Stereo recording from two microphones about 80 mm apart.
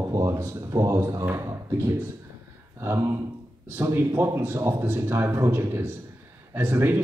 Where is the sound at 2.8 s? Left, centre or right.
Right.